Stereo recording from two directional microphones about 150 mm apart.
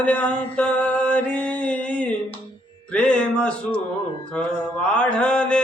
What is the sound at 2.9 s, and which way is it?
Music, 5° left (ahead or behind).